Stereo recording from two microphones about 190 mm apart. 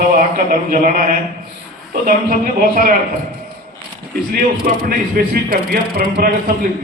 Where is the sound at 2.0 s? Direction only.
45° right (ahead or behind).